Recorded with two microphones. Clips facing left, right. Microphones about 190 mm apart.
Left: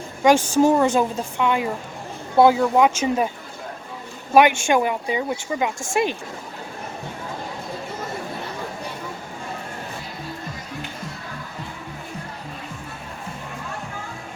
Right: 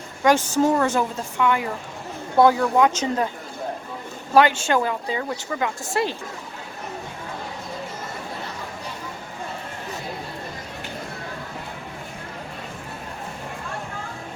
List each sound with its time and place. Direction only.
0.2 s a woman's voice: 15° left (ahead or behind)
4.4 s a woman's voice: 15° left (ahead or behind)